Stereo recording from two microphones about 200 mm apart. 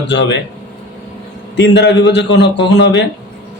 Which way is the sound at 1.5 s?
60° left (ahead or behind).